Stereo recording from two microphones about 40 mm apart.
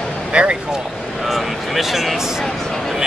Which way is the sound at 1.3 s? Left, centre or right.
Centre.